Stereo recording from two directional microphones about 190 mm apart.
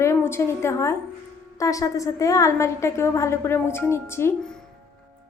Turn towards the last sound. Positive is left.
turn(degrees=15)  # may be behind; listen again after turning